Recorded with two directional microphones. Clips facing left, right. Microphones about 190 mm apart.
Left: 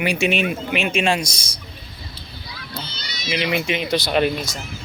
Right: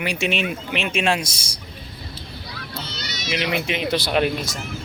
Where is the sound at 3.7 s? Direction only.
5° right (ahead or behind).